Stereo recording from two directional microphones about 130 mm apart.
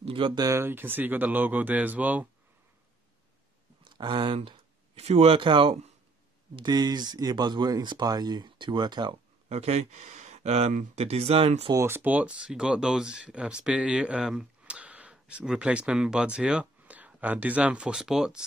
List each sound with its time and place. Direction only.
0.0 s speech: 45° right (ahead or behind)
0.5 s speech: 20° right (ahead or behind)
3.8 s speech: 35° right (ahead or behind)
9.5 s speech: 55° right (ahead or behind)
11.0 s speech: 50° right (ahead or behind)
11.7 s speech: 20° right (ahead or behind); by 18.4 s 5° right (ahead or behind)